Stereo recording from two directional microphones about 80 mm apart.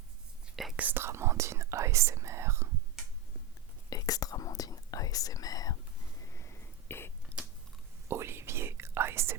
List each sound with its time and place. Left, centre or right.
0.4 s whispering: centre
0.8 s whispering: right
3.8 s whispering: left
6.3 s whispering: left
7.3 s chewing: centre
8.0 s whispering: right